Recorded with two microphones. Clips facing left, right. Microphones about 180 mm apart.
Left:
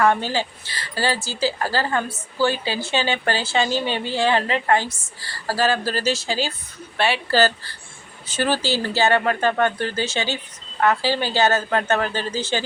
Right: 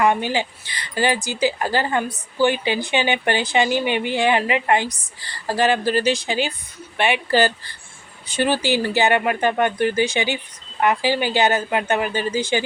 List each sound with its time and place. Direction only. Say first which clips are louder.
0.0 s speech: even; 15° right (ahead or behind)